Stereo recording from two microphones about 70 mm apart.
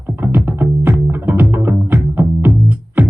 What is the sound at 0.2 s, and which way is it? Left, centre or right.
Music, right.